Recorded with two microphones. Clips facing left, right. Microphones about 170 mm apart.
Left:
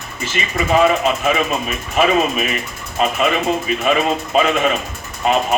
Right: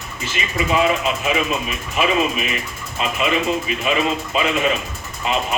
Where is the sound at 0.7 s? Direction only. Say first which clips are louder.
Left 5 dB; 50° left (ahead or behind).